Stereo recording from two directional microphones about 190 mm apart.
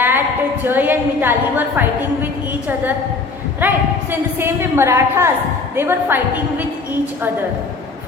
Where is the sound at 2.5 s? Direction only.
10° right (ahead or behind).